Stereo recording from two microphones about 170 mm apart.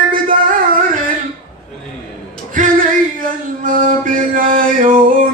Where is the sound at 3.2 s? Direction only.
55° right (ahead or behind).